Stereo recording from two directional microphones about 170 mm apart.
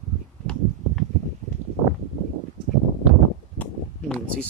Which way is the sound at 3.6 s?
10° left (ahead or behind).